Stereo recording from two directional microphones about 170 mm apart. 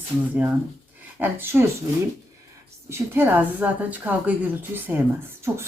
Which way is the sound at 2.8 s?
15° right (ahead or behind).